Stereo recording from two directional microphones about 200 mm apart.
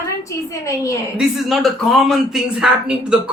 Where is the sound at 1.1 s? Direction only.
Centre (ahead or behind).